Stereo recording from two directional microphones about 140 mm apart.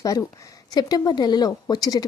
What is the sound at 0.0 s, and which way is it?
Speech, 25° left (ahead or behind).